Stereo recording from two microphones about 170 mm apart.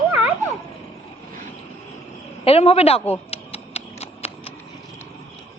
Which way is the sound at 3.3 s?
35° left (ahead or behind).